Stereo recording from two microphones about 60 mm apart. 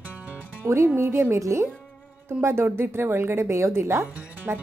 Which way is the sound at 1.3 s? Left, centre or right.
Right.